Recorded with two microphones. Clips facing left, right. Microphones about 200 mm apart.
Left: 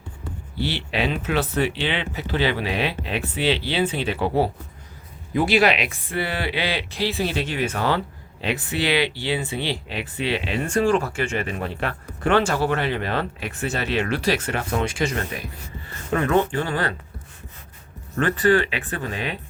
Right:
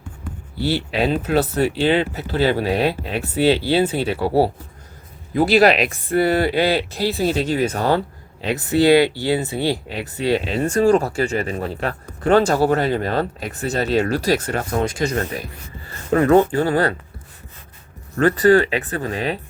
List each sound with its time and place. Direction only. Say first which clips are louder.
0.6 s speech: right 5 dB; 40° right (ahead or behind)
16.2 s speech: right 7 dB; 40° right (ahead or behind)
18.2 s speech: right 5 dB; 40° right (ahead or behind)